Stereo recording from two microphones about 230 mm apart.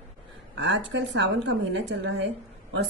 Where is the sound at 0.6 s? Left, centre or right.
Right.